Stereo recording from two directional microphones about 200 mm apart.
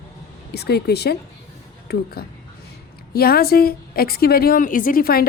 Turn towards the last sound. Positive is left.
turn(degrees=45)  # may be behind; listen again after turning